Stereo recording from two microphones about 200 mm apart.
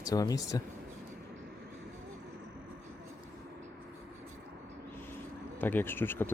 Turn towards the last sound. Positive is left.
turn(degrees=10)  # may be behind; listen again after turning